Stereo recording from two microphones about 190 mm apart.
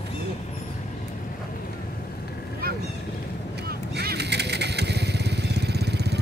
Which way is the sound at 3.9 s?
60° right (ahead or behind).